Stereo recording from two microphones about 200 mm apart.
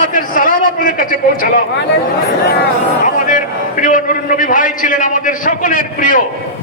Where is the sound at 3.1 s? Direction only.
40° left (ahead or behind).